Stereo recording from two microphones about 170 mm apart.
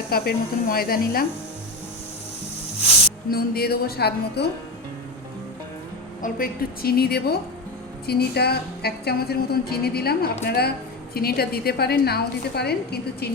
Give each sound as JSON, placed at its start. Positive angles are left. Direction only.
{"t": 0.1, "sound": "a woman's voice", "side_deg": 65}
{"t": 3.2, "sound": "a woman's voice", "side_deg": 65}
{"t": 6.2, "sound": "a woman's voice", "side_deg": 60}